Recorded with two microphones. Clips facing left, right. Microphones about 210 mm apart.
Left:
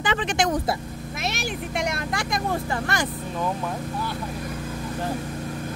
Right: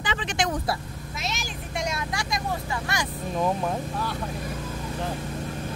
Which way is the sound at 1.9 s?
55° left (ahead or behind).